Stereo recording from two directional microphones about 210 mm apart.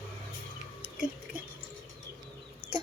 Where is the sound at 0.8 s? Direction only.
5° right (ahead or behind).